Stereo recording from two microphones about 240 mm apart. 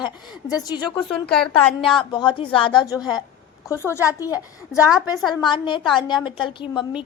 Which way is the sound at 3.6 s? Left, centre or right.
Centre.